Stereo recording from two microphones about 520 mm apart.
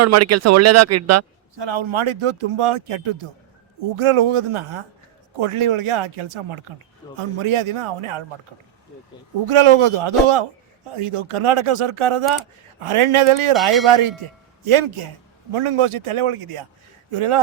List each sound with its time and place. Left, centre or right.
0.0 s speech: right
1.5 s speech: right
9.5 s speech: right